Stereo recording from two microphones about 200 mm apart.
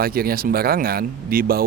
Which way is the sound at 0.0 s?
50° right (ahead or behind).